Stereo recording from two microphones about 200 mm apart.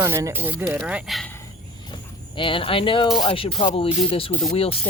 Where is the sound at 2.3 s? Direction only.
25° left (ahead or behind).